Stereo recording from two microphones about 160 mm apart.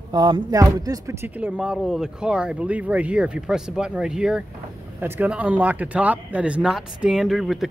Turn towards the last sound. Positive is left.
turn(degrees=0)  # may be behind; listen again after turning